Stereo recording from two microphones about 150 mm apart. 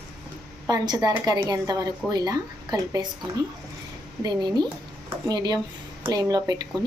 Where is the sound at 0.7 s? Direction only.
25° right (ahead or behind).